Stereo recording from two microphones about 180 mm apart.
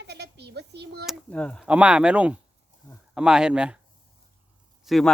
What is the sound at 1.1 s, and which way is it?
Speech, 5° left (ahead or behind).